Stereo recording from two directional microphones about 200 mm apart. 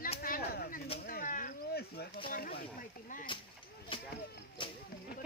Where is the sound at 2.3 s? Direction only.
50° left (ahead or behind).